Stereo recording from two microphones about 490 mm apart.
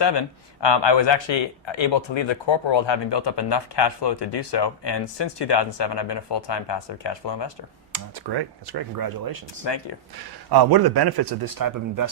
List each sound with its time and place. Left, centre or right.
0.0 s speech: left
7.9 s speech: right
9.6 s speech: left
10.5 s speech: right